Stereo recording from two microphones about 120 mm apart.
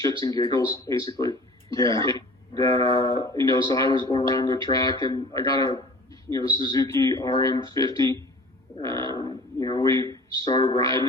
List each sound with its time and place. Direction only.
0.2 s speech: 30° left (ahead or behind)